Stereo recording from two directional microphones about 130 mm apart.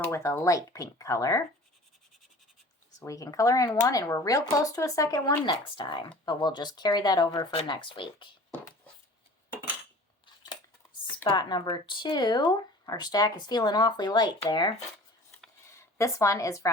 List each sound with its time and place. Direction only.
0.0 s speech: 20° left (ahead or behind)
3.0 s speech: 25° left (ahead or behind)
5.5 s speech: 35° left (ahead or behind)
11.3 s speech: 35° left (ahead or behind)
16.0 s speech: 25° left (ahead or behind)